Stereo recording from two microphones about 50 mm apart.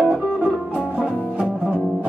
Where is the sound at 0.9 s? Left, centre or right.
Centre.